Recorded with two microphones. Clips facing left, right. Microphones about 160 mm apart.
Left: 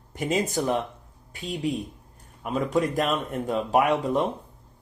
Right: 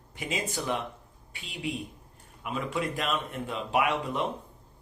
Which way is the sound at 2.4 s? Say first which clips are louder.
Left 7 dB; 40° left (ahead or behind).